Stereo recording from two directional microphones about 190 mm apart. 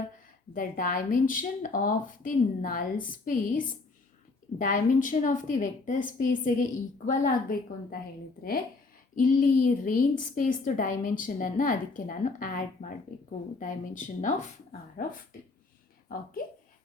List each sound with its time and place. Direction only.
0.5 s a woman's voice: 45° left (ahead or behind)
9.1 s a woman's voice: 45° left (ahead or behind)
16.1 s a woman's voice: 50° left (ahead or behind)